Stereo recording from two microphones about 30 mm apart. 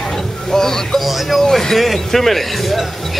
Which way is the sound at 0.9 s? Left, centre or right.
Centre.